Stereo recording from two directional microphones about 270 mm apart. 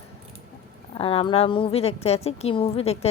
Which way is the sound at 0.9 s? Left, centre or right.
Left.